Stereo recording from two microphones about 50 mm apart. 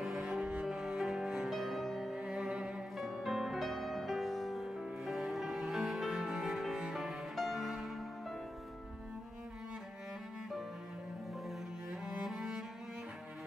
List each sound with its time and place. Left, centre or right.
0.0 s cello: centre
1.5 s music: centre
2.1 s music: centre
3.0 s music: centre
7.3 s music: centre
12.1 s cello: centre